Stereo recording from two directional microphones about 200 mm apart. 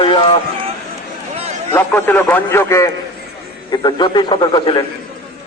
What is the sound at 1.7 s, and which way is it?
A man's voice, 10° left (ahead or behind).